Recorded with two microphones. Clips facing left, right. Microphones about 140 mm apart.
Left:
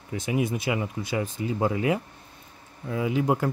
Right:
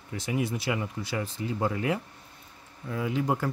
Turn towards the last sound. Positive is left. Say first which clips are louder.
# left 4 dB
turn(degrees=15)  # may be behind; listen again after turning